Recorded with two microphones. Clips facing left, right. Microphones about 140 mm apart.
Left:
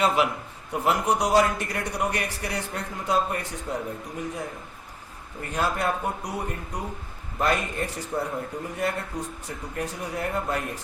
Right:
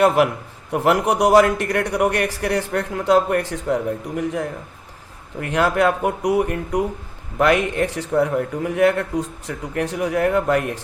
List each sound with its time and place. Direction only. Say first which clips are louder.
0.7 s a man's voice: right 6 dB; 70° right (ahead or behind)